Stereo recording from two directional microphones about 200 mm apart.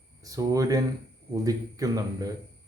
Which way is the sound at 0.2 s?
15° right (ahead or behind).